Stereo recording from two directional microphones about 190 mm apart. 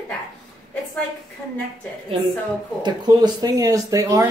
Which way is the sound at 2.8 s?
20° right (ahead or behind).